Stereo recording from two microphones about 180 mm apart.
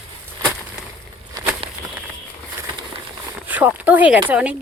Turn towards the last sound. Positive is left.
turn(degrees=-10)  # may be behind; listen again after turning